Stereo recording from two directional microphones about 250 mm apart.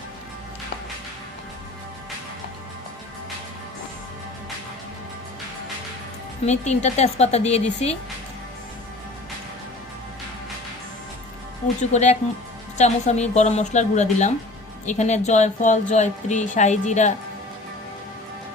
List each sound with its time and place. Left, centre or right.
6.4 s a woman's voice: left
11.8 s a woman's voice: left